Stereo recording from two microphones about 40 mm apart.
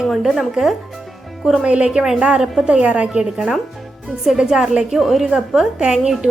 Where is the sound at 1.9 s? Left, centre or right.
Centre.